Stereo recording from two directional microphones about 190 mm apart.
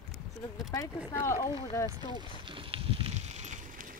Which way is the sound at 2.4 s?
25° right (ahead or behind).